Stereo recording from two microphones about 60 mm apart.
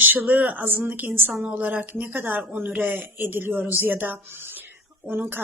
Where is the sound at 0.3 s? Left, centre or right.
Right.